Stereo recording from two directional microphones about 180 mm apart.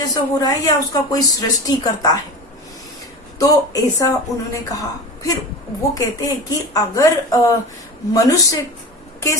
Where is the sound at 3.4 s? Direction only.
20° left (ahead or behind).